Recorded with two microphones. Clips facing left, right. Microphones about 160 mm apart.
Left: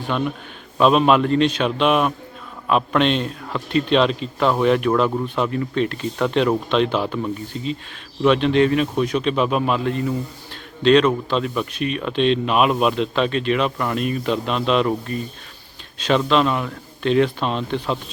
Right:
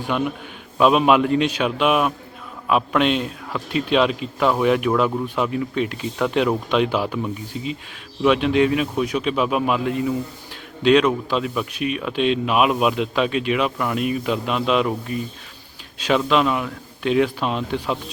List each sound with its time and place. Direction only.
0.1 s speech: 10° right (ahead or behind)